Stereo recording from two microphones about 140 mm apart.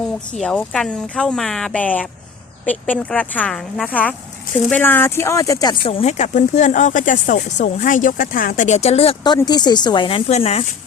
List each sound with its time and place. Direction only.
0.3 s speech: 5° left (ahead or behind); by 5.7 s 25° left (ahead or behind)
5.9 s speech: 50° left (ahead or behind)
9.2 s speech: 30° left (ahead or behind); by 10.7 s 50° left (ahead or behind)